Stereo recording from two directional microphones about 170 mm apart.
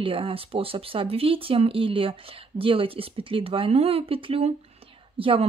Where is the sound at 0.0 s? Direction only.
30° right (ahead or behind).